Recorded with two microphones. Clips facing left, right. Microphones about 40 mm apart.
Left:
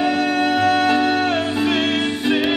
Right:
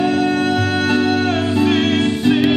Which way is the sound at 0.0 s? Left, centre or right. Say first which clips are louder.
Right 2 dB; centre.